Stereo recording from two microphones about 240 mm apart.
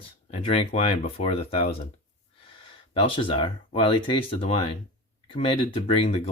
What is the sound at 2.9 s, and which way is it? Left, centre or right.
Speech, left.